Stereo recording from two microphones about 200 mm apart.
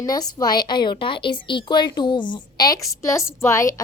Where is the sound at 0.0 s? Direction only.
20° left (ahead or behind).